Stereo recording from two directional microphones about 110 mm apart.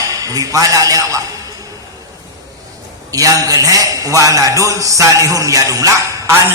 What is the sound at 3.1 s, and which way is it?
A man's voice, 30° right (ahead or behind).